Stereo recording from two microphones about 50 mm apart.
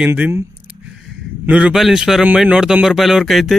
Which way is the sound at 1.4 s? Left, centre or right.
Right.